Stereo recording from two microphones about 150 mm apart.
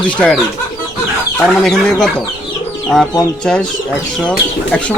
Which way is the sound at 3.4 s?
5° left (ahead or behind).